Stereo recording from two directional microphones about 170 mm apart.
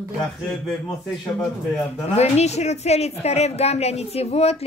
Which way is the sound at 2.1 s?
40° left (ahead or behind).